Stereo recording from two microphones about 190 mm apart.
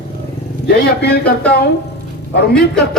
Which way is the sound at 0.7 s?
60° left (ahead or behind).